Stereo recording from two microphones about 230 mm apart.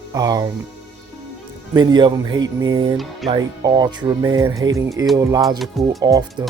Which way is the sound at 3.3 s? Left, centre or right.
Centre.